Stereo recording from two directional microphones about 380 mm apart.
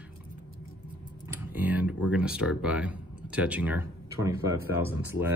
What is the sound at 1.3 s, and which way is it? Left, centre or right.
A man's voice, centre.